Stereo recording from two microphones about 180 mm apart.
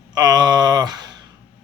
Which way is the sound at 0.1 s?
20° right (ahead or behind).